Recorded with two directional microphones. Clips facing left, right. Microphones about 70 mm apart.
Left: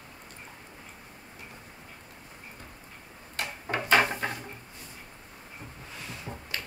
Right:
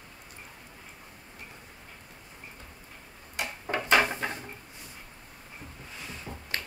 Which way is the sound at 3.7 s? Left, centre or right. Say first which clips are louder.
Even; left.